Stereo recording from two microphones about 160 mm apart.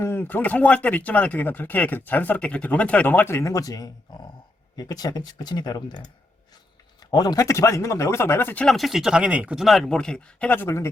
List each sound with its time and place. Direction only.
0.0 s speech: 15° left (ahead or behind)
7.1 s speech: 25° left (ahead or behind)
8.6 s speech: centre (ahead or behind)